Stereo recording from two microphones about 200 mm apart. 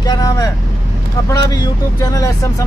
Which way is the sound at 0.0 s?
20° left (ahead or behind).